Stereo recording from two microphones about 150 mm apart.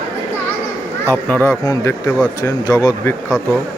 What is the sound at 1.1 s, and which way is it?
Speech, 10° left (ahead or behind).